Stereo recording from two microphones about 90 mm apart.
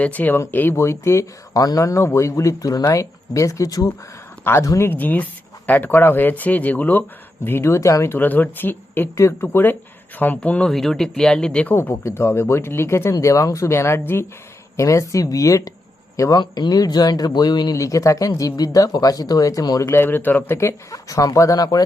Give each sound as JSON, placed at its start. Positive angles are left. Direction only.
{"t": 0.0, "sound": "speech", "side_deg": 15}
{"t": 4.4, "sound": "speech", "side_deg": 25}
{"t": 7.4, "sound": "speech", "side_deg": 30}
{"t": 10.7, "sound": "speech", "side_deg": 5}
{"t": 11.7, "sound": "speech", "side_deg": 25}
{"t": 16.4, "sound": "speech", "side_deg": 50}
{"t": 17.7, "sound": "speech", "side_deg": 35}
{"t": 19.9, "sound": "speech", "side_deg": 25}
{"t": 20.6, "sound": "speech", "side_deg": 35}